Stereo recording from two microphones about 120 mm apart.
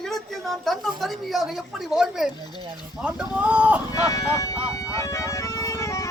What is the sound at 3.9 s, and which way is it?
Bagpipes, 25° left (ahead or behind).